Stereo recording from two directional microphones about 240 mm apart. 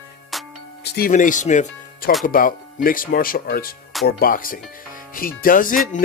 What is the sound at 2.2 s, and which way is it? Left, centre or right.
Music, left.